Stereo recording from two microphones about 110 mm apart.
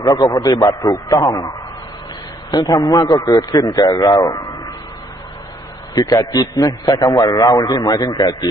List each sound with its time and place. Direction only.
0.0 s a man's voice: 35° left (ahead or behind)
2.5 s a man's voice: 35° left (ahead or behind)
5.9 s a man's voice: 30° left (ahead or behind)